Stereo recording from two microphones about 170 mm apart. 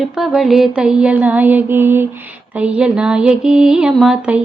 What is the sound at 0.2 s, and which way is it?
Music, centre (ahead or behind).